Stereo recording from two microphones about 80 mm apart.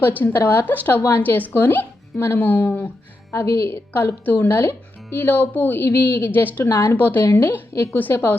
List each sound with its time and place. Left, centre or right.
0.2 s speech: left